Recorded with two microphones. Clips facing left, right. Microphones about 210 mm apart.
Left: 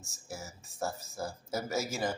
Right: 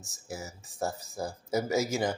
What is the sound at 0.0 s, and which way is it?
Speech, 15° right (ahead or behind).